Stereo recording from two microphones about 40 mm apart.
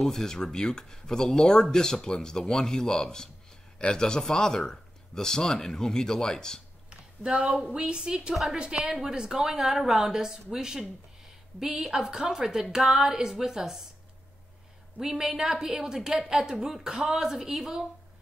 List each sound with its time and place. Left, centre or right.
0.0 s speech: centre
6.9 s a sound: right
7.7 s a woman's voice: right
15.0 s a woman's voice: centre